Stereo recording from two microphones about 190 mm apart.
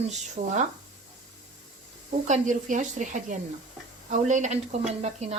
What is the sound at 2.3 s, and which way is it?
Speech, 40° right (ahead or behind).